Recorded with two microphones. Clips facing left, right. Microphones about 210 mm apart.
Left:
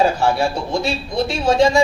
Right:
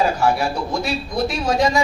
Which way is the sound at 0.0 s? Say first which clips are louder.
Left 2 dB; 30° left (ahead or behind).